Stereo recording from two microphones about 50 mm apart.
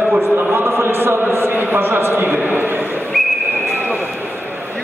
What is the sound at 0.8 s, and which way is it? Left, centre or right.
Chant, right.